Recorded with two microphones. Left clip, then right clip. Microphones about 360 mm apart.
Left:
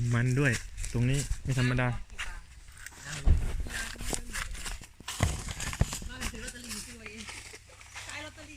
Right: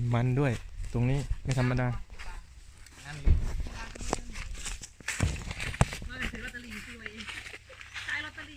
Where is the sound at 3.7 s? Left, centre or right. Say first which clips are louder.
Even; left.